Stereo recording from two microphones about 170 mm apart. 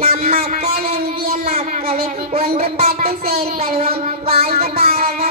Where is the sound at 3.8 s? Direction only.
65° right (ahead or behind).